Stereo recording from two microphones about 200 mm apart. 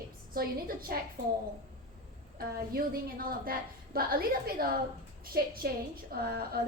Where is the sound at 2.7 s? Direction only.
45° right (ahead or behind).